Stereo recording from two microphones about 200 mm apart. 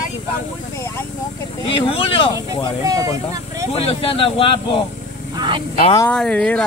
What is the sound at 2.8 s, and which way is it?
Speech, 15° right (ahead or behind).